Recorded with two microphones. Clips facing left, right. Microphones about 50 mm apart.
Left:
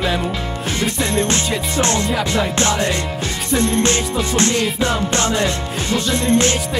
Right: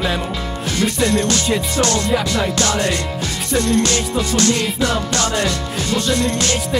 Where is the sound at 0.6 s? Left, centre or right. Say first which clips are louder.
Right 4 dB; left.